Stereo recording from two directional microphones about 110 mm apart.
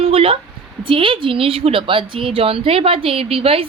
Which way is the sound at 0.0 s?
60° right (ahead or behind).